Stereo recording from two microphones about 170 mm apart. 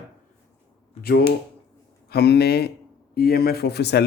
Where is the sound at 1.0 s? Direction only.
70° left (ahead or behind).